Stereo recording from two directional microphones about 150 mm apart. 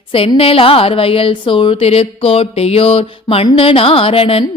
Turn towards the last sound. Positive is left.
turn(degrees=40)  # may be behind; listen again after turning